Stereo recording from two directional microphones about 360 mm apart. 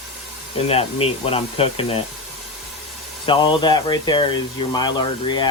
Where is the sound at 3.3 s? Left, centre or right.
Centre.